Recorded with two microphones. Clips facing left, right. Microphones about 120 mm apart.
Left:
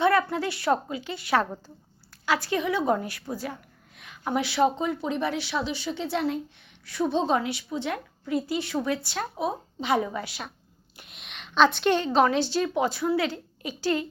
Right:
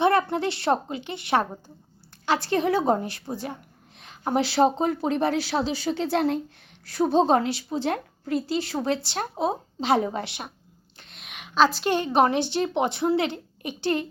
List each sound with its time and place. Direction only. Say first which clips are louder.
0.0 s speech: right 1 dB; 25° right (ahead or behind)
10.9 s a sound: right 1 dB; 5° left (ahead or behind)
11.9 s a woman's voice: right 4 dB; 15° right (ahead or behind)